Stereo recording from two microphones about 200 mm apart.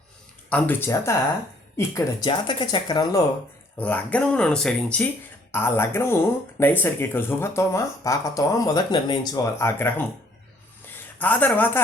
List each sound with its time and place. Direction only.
0.5 s speech: 10° left (ahead or behind)
3.8 s speech: 5° left (ahead or behind)
11.2 s speech: 10° left (ahead or behind)